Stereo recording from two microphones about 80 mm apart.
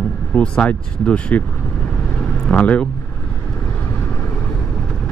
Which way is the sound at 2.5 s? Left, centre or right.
Centre.